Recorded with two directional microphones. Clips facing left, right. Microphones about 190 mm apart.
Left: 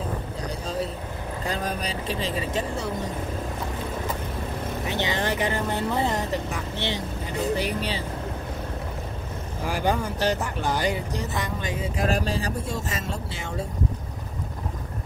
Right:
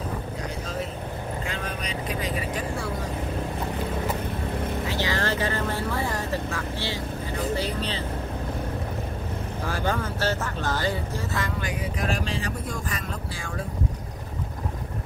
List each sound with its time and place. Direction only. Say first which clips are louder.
1.4 s speech: left 3 dB; 35° left (ahead or behind); by 3.1 s 20° left (ahead or behind)
4.8 s speech: left 3 dB; 20° left (ahead or behind)
9.7 s speech: left 3 dB; 15° left (ahead or behind)
12.1 s speech: left 3 dB; 40° left (ahead or behind)